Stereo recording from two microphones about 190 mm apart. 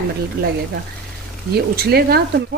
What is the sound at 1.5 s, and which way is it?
Speech, 55° right (ahead or behind).